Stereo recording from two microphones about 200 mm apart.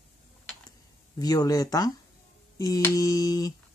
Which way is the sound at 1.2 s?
20° left (ahead or behind).